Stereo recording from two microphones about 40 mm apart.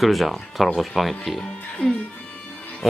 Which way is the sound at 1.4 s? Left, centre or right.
Centre.